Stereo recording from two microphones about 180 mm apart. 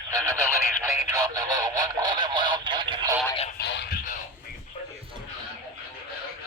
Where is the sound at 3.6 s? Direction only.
65° left (ahead or behind).